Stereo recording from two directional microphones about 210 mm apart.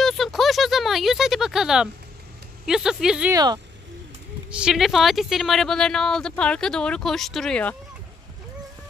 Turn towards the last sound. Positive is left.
turn(degrees=5)  # may be behind; listen again after turning